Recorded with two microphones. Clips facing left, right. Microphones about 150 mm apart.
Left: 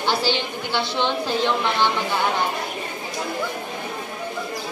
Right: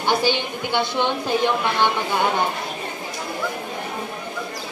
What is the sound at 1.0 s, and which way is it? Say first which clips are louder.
Speech: even; 10° right (ahead or behind).